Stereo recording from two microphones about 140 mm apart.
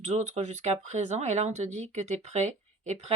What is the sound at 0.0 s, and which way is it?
Speech, 55° right (ahead or behind).